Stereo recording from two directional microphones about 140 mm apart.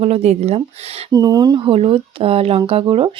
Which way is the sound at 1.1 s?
25° right (ahead or behind).